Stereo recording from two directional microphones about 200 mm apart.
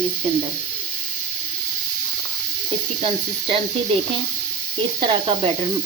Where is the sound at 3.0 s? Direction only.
25° right (ahead or behind).